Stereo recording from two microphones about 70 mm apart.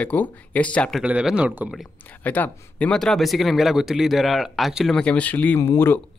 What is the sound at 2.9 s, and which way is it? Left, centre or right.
Speech, centre.